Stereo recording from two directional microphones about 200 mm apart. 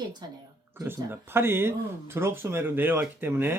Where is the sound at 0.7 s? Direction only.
10° right (ahead or behind).